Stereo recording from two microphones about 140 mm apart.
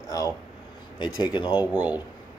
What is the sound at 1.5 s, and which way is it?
Speech, 10° right (ahead or behind).